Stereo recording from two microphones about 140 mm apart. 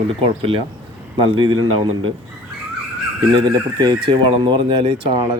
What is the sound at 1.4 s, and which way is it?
Speech, 35° right (ahead or behind).